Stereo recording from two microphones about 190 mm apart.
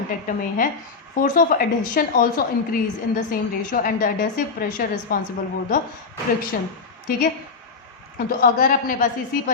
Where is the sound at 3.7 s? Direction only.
50° left (ahead or behind).